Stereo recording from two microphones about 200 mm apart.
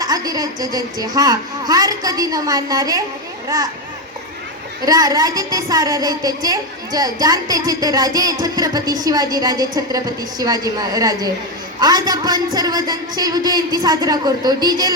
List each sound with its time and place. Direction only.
0.0 s a woman's voice: 20° right (ahead or behind)
4.9 s a woman's voice: 20° right (ahead or behind)